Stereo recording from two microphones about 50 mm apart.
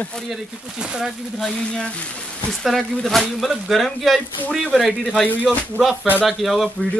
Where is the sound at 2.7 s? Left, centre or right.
Centre.